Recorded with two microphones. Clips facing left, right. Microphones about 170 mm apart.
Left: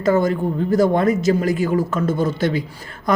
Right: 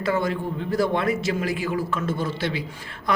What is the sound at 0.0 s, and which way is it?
A man's voice, 40° left (ahead or behind).